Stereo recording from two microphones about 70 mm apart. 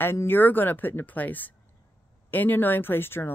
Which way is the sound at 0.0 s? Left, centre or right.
Left.